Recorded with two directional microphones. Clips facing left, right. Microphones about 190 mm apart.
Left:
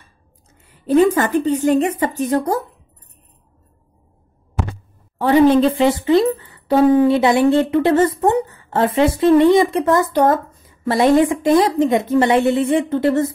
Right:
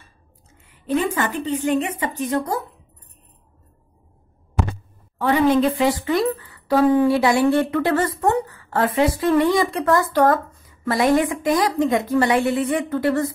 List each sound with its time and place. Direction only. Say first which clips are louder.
0.8 s a woman's voice: left 8 dB; 40° left (ahead or behind)
5.2 s speech: left 5 dB; 30° left (ahead or behind)